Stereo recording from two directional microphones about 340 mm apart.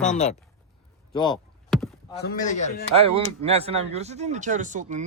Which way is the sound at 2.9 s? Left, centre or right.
Centre.